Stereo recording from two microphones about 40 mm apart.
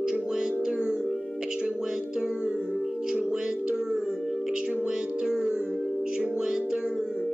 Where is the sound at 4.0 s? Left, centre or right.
Centre.